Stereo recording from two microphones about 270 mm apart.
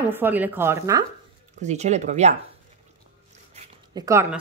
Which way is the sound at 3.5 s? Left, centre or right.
Centre.